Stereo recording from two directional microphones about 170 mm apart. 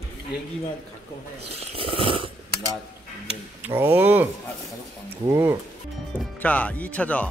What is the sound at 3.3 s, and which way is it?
Speech, 10° right (ahead or behind).